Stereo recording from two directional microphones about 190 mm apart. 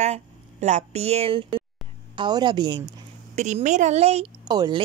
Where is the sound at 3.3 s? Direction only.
40° right (ahead or behind).